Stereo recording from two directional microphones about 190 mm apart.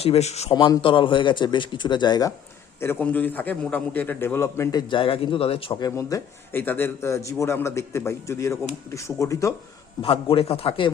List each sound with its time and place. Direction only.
0.0 s a man's voice: 35° left (ahead or behind)
0.5 s speech: 25° left (ahead or behind)
2.8 s a man's voice: 10° left (ahead or behind); by 5.9 s 30° left (ahead or behind)
6.0 s a man's voice: 15° left (ahead or behind)
10.0 s speech: 30° left (ahead or behind)